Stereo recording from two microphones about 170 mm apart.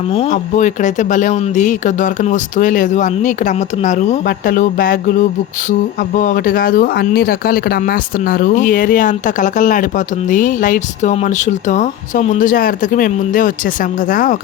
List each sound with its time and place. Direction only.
0.5 s speech: 45° left (ahead or behind)